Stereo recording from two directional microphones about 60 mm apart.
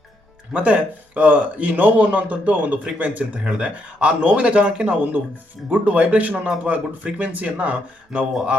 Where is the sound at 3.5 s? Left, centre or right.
Centre.